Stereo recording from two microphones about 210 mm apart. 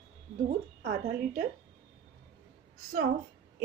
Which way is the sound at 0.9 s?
40° right (ahead or behind).